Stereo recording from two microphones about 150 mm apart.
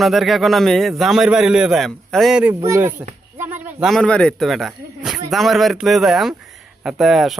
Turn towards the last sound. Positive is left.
turn(degrees=0)  # may be behind; listen again after turning